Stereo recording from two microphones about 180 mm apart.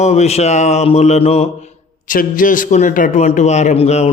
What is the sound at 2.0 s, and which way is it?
A man's voice, 50° left (ahead or behind).